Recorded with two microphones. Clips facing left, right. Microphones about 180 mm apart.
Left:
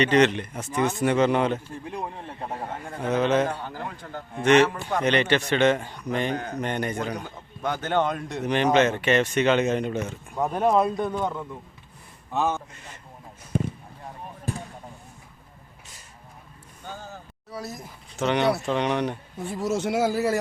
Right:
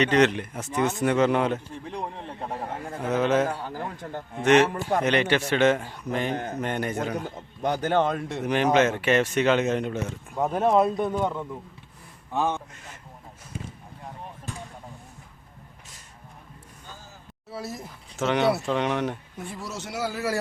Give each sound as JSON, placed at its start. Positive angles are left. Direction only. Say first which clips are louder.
{"t": 0.0, "sound": "a man's voice", "louder": "left 1 dB", "side_deg": 0}
{"t": 4.7, "sound": "a man's voice", "louder": "right 3 dB", "side_deg": -45}
{"t": 4.9, "sound": "a man's voice", "louder": "left 1 dB", "side_deg": -5}
{"t": 17.5, "sound": "speech", "louder": "right 1 dB", "side_deg": -5}
{"t": 19.5, "sound": "speech", "louder": "left 10 dB", "side_deg": 50}